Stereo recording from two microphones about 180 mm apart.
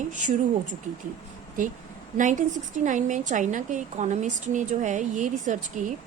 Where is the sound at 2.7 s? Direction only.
45° right (ahead or behind).